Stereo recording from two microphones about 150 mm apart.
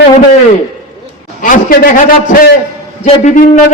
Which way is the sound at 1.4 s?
65° left (ahead or behind).